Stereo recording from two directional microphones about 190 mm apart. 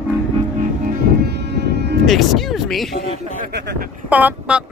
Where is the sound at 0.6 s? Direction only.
55° right (ahead or behind).